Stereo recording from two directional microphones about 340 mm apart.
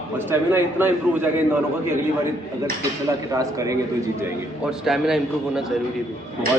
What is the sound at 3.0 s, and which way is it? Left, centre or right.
A man's voice, centre.